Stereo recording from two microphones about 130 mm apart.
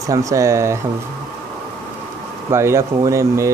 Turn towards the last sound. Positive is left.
turn(degrees=-20)  # may be behind; listen again after turning